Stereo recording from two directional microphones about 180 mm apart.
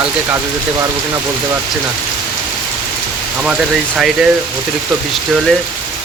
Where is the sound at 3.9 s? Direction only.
5° right (ahead or behind).